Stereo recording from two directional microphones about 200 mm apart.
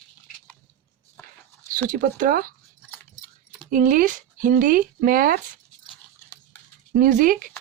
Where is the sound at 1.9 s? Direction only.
40° right (ahead or behind).